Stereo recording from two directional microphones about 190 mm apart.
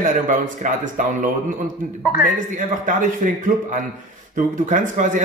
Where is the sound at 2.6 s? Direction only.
45° right (ahead or behind).